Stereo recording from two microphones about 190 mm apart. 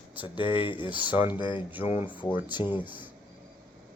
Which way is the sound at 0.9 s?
10° right (ahead or behind).